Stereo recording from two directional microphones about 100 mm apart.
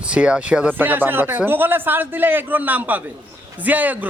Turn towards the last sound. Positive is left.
turn(degrees=-15)  # may be behind; listen again after turning